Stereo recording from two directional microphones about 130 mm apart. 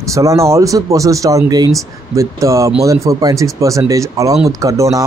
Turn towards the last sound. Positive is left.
turn(degrees=-25)  # may be behind; listen again after turning